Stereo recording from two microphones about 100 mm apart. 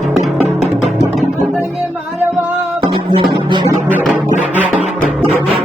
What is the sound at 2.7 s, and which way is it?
Music, 50° right (ahead or behind).